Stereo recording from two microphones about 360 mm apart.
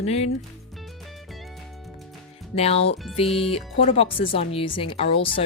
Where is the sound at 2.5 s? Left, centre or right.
Centre.